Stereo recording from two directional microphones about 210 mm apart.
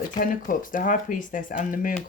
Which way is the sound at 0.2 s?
40° left (ahead or behind).